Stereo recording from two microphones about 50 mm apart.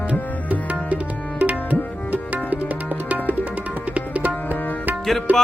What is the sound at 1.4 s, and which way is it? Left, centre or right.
Tabla, right.